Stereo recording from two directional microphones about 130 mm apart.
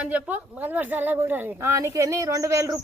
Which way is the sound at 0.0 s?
10° right (ahead or behind).